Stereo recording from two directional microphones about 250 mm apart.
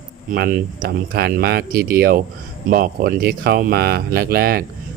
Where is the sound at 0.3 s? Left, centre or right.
Right.